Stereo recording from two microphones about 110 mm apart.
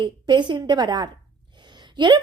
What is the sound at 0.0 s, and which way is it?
Speech, 45° right (ahead or behind).